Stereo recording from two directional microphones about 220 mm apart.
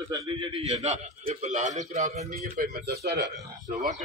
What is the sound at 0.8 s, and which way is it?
A man's voice, 30° right (ahead or behind).